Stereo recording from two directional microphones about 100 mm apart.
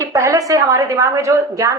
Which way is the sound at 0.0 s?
30° right (ahead or behind).